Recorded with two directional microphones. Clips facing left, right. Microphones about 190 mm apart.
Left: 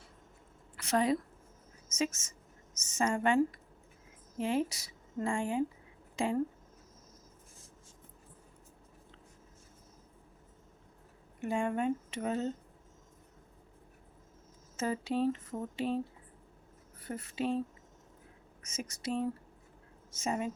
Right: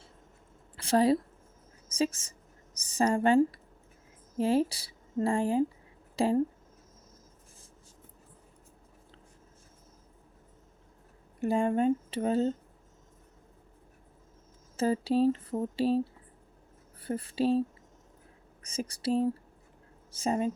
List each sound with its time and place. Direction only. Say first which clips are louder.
0.8 s a woman's voice: right 5 dB; 30° right (ahead or behind)
11.3 s a woman's voice: right 6 dB; 35° right (ahead or behind)
14.8 s a woman's voice: right 6 dB; 35° right (ahead or behind)
17.0 s speech: right 6 dB; 30° right (ahead or behind)
18.6 s a woman's voice: right 6 dB; 35° right (ahead or behind)